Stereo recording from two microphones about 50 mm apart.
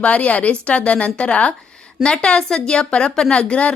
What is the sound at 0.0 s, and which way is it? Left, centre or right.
Speech, left.